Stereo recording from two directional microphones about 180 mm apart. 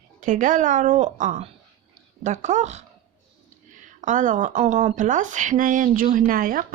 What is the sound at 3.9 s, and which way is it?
Speech, 45° right (ahead or behind).